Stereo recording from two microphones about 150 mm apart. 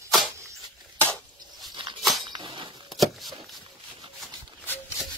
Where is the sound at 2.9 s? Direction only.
Centre (ahead or behind).